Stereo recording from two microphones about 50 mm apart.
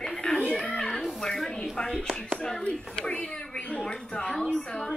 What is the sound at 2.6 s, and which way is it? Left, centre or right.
Speech, left.